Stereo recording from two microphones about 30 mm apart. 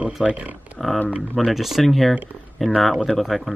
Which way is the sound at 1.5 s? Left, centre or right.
Centre.